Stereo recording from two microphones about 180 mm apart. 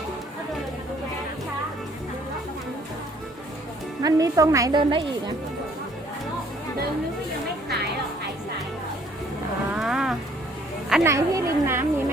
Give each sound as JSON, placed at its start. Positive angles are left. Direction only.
{"t": 4.0, "sound": "a woman's voice", "side_deg": -20}
{"t": 9.7, "sound": "moo", "side_deg": -5}
{"t": 11.0, "sound": "a sound", "side_deg": -15}